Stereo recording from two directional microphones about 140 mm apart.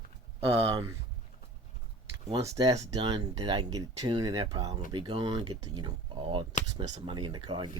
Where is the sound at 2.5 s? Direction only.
20° right (ahead or behind).